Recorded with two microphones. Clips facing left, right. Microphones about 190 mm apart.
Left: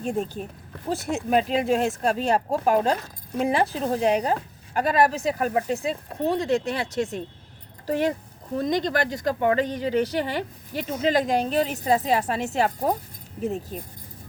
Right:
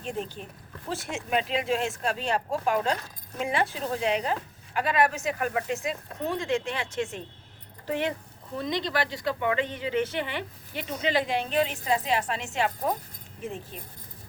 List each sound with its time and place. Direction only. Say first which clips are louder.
0.0 s speech: left 6 dB; 45° left (ahead or behind)